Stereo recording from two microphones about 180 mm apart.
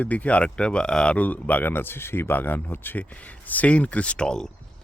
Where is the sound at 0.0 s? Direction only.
10° left (ahead or behind).